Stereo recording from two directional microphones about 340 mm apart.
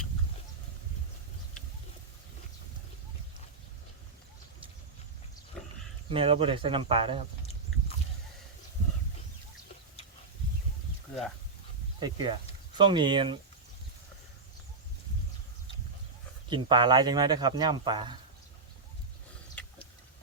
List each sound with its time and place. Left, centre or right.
6.1 s speech: centre
11.9 s speech: centre
16.5 s speech: centre
19.6 s a sound: centre